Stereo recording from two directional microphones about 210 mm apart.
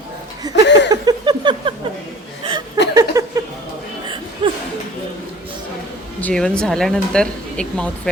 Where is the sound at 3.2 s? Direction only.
15° right (ahead or behind).